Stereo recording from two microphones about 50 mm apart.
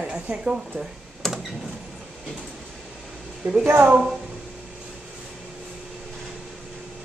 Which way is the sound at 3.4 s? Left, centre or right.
Right.